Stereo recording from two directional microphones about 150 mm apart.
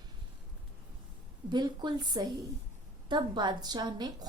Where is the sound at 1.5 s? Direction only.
30° right (ahead or behind).